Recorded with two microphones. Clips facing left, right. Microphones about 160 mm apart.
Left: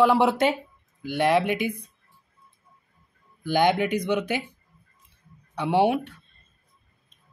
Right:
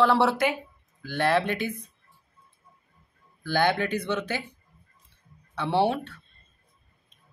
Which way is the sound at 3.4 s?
15° left (ahead or behind).